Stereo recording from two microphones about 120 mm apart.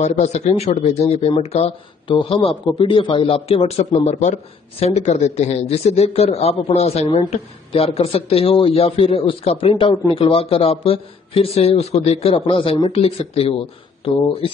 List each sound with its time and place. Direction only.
0.0 s speech: 70° left (ahead or behind)
2.0 s speech: 45° left (ahead or behind)
4.0 s speech: 75° left (ahead or behind); by 13.6 s 55° left (ahead or behind)